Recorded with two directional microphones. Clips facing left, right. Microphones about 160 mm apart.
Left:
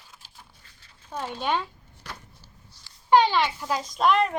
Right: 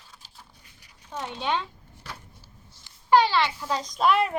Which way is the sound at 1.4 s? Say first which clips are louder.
Left 1 dB; 10° left (ahead or behind).